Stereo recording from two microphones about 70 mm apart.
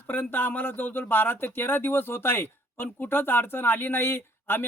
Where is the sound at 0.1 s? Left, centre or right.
Left.